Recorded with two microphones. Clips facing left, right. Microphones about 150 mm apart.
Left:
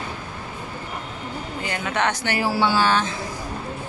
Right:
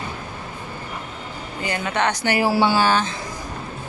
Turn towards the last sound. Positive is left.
turn(degrees=-5)  # may be behind; listen again after turning